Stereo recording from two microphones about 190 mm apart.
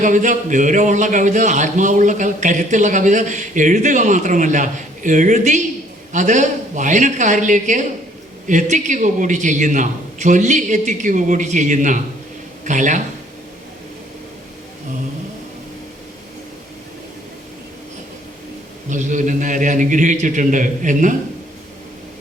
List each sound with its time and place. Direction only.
0.0 s a man's voice: 40° right (ahead or behind)
18.9 s a man's voice: 40° right (ahead or behind)